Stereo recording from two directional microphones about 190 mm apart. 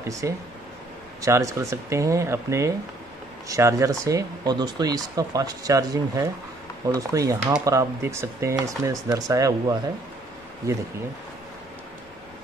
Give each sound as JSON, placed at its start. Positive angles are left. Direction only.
{"t": 0.2, "sound": "speech", "side_deg": -15}